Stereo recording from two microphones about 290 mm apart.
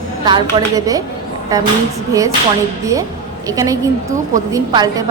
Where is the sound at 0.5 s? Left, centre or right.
Centre.